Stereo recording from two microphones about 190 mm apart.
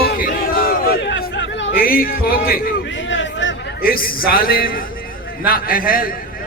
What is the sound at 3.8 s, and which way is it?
Speech, 50° left (ahead or behind).